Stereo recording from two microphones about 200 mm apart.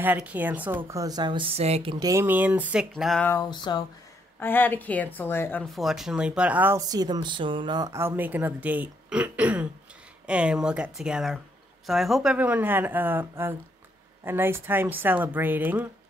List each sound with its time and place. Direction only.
0.0 s speech: 10° right (ahead or behind)
3.3 s a sound: 20° left (ahead or behind)
4.4 s speech: 10° left (ahead or behind); by 15.9 s 10° right (ahead or behind)